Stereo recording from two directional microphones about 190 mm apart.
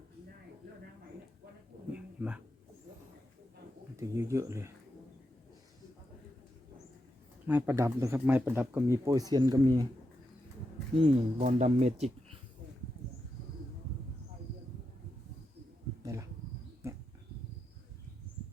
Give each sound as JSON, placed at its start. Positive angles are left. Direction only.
{"t": 1.9, "sound": "a sound", "side_deg": -5}
{"t": 3.9, "sound": "speech", "side_deg": -15}
{"t": 7.4, "sound": "speech", "side_deg": -10}
{"t": 10.9, "sound": "speech", "side_deg": -35}
{"t": 16.8, "sound": "dog", "side_deg": -15}